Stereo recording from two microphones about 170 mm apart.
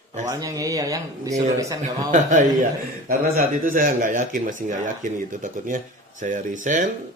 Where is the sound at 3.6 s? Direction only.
50° right (ahead or behind).